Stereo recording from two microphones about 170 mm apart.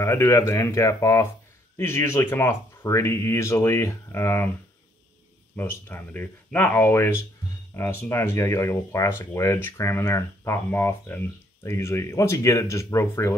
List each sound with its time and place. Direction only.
0.0 s speech: 15° left (ahead or behind)
5.6 s speech: 10° left (ahead or behind)